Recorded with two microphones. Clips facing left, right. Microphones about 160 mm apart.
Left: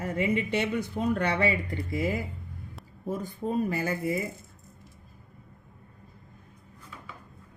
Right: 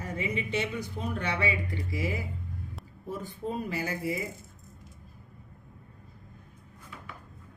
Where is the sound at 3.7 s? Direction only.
50° left (ahead or behind).